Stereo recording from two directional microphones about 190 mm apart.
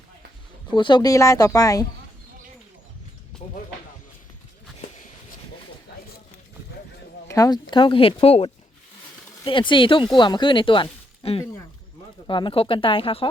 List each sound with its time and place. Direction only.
0.7 s speech: 25° left (ahead or behind)
7.3 s speech: 20° left (ahead or behind)